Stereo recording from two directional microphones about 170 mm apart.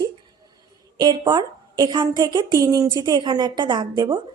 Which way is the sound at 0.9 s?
25° right (ahead or behind).